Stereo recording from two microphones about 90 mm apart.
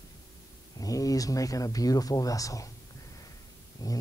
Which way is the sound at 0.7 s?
40° left (ahead or behind).